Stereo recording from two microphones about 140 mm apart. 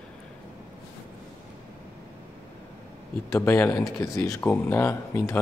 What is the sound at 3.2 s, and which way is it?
Speech, 20° left (ahead or behind).